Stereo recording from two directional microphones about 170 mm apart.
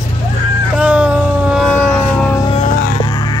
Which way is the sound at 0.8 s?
5° right (ahead or behind).